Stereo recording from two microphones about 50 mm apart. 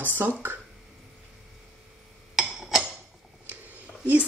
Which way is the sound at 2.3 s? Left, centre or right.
Centre.